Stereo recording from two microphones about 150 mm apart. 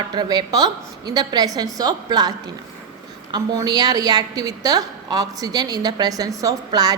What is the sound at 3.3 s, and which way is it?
A woman's voice, 25° right (ahead or behind).